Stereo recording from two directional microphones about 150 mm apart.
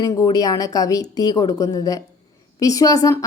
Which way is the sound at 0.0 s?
25° left (ahead or behind).